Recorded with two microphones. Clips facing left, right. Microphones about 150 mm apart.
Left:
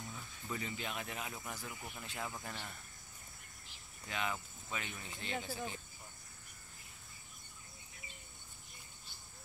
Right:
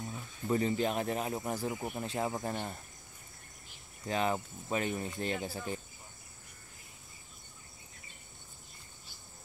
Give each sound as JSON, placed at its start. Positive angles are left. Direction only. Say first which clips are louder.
{"t": 0.0, "sound": "speech", "louder": "right 8 dB", "side_deg": -35}
{"t": 4.1, "sound": "speech", "louder": "right 9 dB", "side_deg": -35}